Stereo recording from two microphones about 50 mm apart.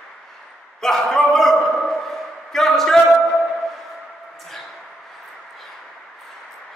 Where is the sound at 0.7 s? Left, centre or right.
Centre.